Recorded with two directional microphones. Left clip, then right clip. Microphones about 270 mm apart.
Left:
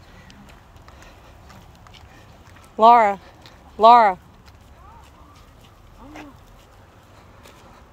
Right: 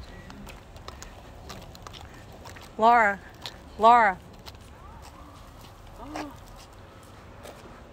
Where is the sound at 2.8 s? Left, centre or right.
Centre.